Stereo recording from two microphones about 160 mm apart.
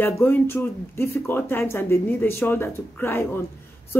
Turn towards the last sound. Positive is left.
turn(degrees=15)  # may be behind; listen again after turning